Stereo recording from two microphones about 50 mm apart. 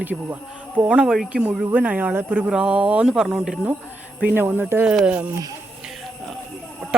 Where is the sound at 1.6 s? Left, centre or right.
Right.